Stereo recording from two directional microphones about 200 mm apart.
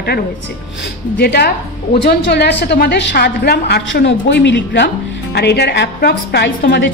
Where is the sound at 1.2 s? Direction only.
55° left (ahead or behind).